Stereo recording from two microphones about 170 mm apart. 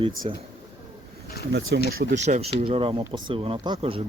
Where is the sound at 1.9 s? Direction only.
60° right (ahead or behind).